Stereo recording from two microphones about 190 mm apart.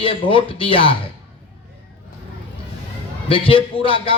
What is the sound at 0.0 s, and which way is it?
Speech, 30° left (ahead or behind).